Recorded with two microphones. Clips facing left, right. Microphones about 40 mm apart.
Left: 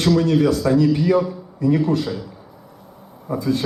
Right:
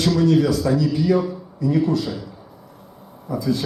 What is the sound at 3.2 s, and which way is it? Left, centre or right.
Speech, left.